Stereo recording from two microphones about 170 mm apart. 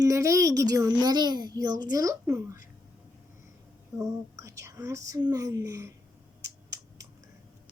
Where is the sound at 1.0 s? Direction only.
25° right (ahead or behind).